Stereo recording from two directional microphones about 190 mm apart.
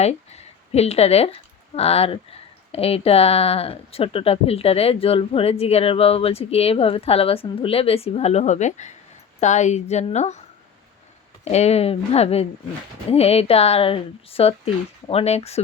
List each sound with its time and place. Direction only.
0.0 s speech: 35° left (ahead or behind)
11.5 s speech: 35° left (ahead or behind)